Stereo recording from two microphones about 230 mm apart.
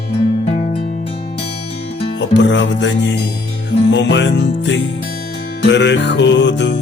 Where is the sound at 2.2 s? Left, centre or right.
Left.